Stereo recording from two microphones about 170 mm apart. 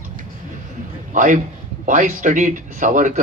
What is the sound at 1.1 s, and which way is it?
Speech, 50° right (ahead or behind).